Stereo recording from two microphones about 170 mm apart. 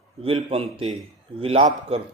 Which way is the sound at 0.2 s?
35° right (ahead or behind).